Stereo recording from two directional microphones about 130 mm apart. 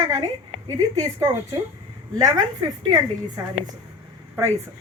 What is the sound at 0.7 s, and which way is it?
A woman's voice, 25° right (ahead or behind).